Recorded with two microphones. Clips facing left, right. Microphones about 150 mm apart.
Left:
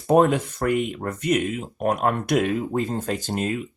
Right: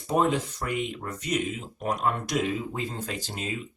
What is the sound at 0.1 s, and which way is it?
Speech, 55° left (ahead or behind).